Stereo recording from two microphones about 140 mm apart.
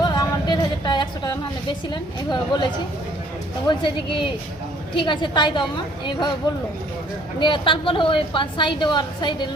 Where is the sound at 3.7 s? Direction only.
35° left (ahead or behind).